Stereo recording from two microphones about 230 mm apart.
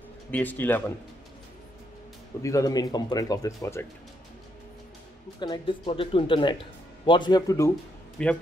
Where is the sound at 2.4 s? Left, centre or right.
Centre.